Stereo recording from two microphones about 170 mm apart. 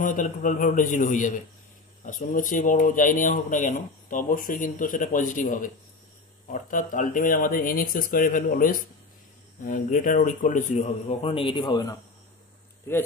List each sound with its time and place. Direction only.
0.0 s speech: 50° left (ahead or behind); by 12.0 s 25° left (ahead or behind)